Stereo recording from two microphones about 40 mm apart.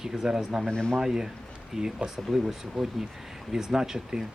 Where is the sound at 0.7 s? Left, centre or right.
Centre.